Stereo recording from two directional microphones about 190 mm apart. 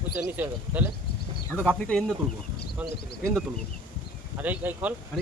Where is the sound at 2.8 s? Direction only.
10° right (ahead or behind).